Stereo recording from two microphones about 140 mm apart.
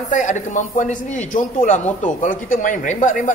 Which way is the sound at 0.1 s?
65° left (ahead or behind).